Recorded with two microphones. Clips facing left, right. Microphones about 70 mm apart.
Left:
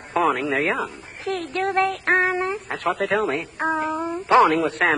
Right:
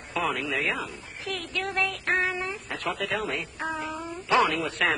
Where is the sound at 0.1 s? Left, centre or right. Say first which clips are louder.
Left 8 dB; left.